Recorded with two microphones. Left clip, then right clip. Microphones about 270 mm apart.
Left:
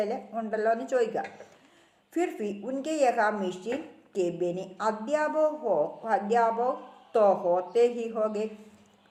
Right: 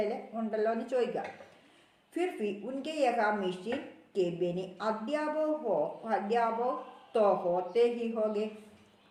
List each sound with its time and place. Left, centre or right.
0.0 s speech: left